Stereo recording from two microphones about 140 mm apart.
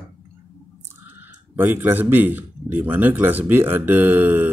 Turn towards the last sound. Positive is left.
turn(degrees=-15)  # may be behind; listen again after turning